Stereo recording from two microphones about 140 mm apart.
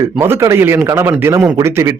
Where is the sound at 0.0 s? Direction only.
20° right (ahead or behind).